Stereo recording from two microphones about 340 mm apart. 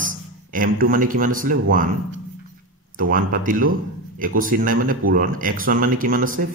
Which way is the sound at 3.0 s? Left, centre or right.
Right.